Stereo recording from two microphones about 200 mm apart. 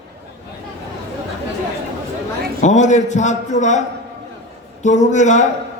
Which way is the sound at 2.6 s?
35° left (ahead or behind).